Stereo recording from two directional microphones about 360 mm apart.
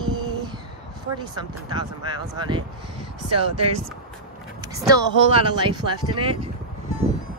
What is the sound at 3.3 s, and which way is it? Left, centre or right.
Speech, right.